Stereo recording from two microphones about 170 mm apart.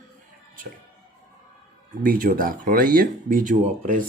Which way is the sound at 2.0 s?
55° right (ahead or behind).